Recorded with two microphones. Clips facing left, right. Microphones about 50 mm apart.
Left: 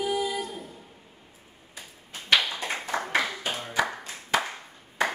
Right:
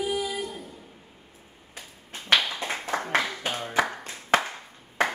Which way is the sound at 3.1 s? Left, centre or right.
Right.